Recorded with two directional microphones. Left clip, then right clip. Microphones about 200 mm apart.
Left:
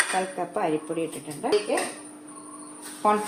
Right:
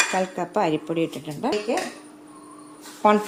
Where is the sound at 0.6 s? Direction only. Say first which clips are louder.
Right 5 dB; 50° right (ahead or behind).